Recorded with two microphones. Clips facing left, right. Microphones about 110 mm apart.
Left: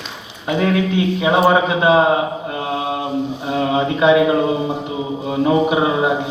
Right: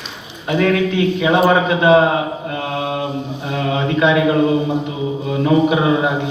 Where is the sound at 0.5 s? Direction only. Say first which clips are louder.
Right 2 dB; 15° left (ahead or behind).